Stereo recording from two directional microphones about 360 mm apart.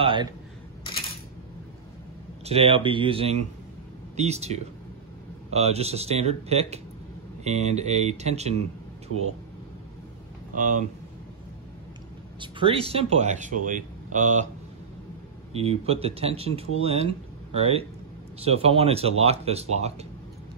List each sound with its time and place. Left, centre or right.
0.0 s speech: centre
2.4 s speech: centre
10.5 s speech: right
12.4 s speech: centre
15.5 s speech: centre